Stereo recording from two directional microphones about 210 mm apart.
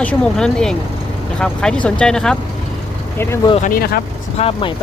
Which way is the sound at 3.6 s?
45° left (ahead or behind).